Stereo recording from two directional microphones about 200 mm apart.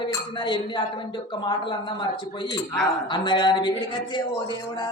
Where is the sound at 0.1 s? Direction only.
20° left (ahead or behind).